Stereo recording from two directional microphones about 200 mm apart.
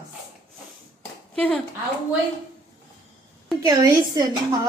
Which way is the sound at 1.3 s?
5° left (ahead or behind).